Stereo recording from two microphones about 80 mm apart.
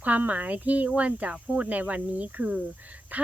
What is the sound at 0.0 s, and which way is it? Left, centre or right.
A woman's voice, centre.